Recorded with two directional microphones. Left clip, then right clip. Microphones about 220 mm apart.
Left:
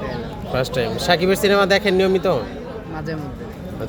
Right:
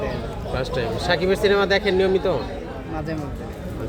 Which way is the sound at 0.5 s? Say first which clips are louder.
Left 4 dB; 45° left (ahead or behind).